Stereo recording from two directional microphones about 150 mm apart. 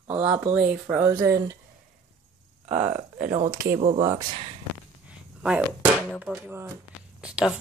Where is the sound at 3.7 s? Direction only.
40° right (ahead or behind).